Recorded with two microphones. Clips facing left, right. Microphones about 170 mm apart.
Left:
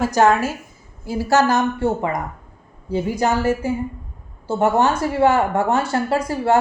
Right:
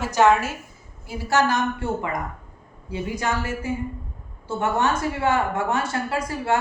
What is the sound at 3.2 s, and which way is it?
A woman's voice, 35° left (ahead or behind).